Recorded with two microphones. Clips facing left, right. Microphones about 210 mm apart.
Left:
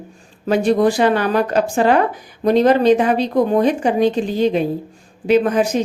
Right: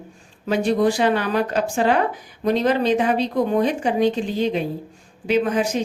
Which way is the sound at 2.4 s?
40° left (ahead or behind).